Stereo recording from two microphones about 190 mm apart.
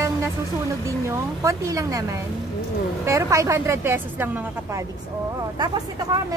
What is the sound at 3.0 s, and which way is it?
Speech, 15° right (ahead or behind).